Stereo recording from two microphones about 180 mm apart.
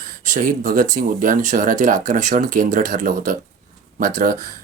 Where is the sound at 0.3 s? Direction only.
45° right (ahead or behind).